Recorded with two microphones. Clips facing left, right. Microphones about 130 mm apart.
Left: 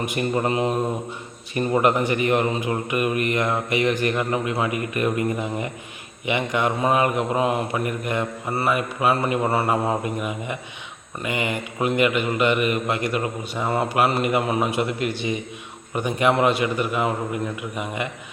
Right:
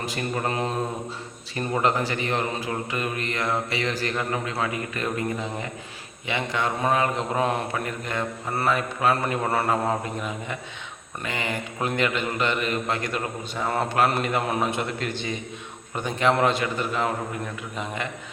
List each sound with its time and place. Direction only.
0.0 s a man's voice: 20° left (ahead or behind)
6.2 s a man's voice: 15° left (ahead or behind)